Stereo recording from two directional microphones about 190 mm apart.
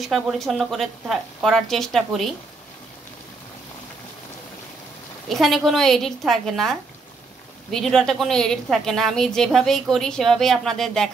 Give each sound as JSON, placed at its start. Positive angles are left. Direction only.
{"t": 0.0, "sound": "a woman's voice", "side_deg": 0}
{"t": 5.3, "sound": "a woman's voice", "side_deg": 0}